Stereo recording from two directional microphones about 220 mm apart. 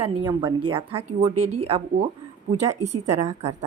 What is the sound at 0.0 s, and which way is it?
Speech, 20° right (ahead or behind).